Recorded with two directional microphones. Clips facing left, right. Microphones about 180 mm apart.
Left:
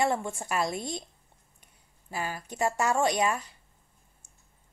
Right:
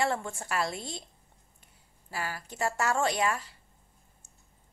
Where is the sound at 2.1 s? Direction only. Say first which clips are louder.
Left 2 dB; 20° left (ahead or behind).